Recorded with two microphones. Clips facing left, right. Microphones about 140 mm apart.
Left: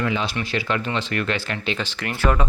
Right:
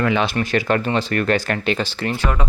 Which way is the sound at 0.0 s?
65° right (ahead or behind).